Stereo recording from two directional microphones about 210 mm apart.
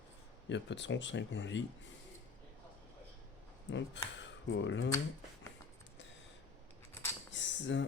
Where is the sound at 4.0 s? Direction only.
60° left (ahead or behind).